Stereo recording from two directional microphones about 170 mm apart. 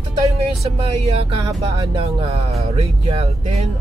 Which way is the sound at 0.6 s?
35° right (ahead or behind).